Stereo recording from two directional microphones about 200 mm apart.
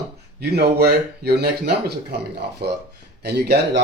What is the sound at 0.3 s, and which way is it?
Speech, 55° right (ahead or behind).